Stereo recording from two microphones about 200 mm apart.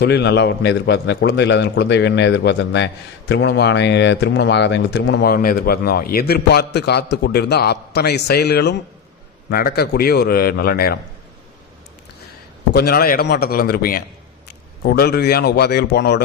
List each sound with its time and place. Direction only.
0.0 s a man's voice: 55° left (ahead or behind)
12.7 s a man's voice: 50° left (ahead or behind)